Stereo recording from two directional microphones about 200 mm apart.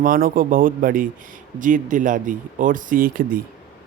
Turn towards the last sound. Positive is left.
turn(degrees=-45)  # may be behind; listen again after turning